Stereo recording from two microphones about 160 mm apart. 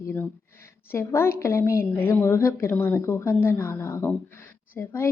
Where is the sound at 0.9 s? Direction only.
15° left (ahead or behind).